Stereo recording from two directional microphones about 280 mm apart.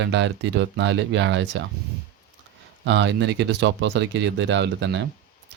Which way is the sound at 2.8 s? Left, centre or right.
Right.